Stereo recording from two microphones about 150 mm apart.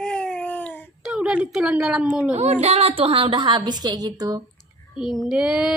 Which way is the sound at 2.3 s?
45° right (ahead or behind).